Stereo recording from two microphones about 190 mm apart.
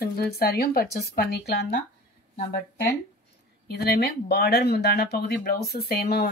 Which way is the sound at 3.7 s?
55° left (ahead or behind).